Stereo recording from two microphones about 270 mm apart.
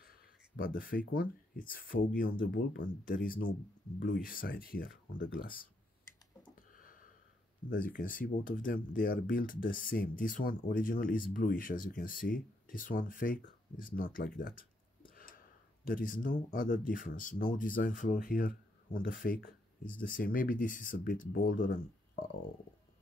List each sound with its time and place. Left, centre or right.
0.6 s speech: left
6.7 s a sound: left
7.7 s speech: left